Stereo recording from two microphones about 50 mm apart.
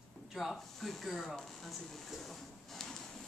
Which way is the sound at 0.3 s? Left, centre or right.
Centre.